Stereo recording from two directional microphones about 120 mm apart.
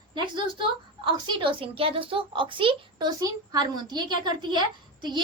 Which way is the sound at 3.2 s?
30° right (ahead or behind).